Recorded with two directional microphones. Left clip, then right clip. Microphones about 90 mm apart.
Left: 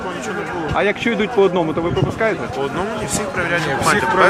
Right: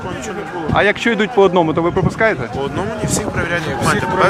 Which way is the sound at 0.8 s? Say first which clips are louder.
Right 4 dB; 35° right (ahead or behind).